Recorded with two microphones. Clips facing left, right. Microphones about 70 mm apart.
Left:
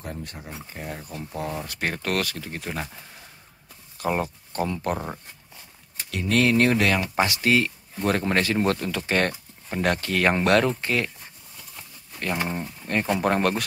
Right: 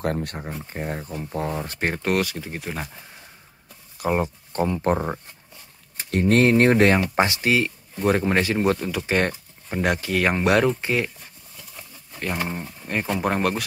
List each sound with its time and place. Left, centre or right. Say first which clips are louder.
0.0 s speech: right 10 dB; right
0.7 s speech: right 5 dB; right; by 3.1 s centre
4.0 s speech: right 3 dB; centre
6.0 s speech: right 4 dB; right
7.4 s speech: even; centre
12.4 s speech: left 1 dB; centre